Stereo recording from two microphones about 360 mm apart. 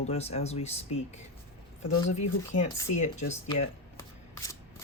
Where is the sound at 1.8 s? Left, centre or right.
Left.